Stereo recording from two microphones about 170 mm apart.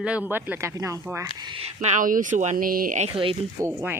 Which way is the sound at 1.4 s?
30° right (ahead or behind).